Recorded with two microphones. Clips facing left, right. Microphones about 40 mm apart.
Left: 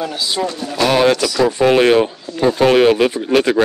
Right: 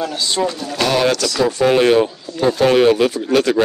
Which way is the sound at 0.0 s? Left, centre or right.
Centre.